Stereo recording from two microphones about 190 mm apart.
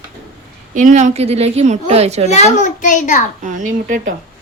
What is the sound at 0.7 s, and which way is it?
A woman's voice, 45° right (ahead or behind).